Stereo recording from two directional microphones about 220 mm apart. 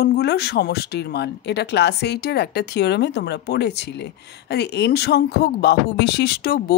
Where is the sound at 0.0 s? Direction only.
50° left (ahead or behind).